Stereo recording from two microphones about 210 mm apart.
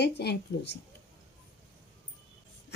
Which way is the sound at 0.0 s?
50° left (ahead or behind).